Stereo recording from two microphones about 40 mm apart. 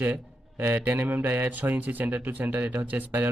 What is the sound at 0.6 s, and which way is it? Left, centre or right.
Speech, right.